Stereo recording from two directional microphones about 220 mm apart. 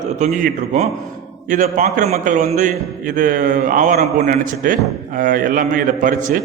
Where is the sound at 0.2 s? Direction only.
35° right (ahead or behind).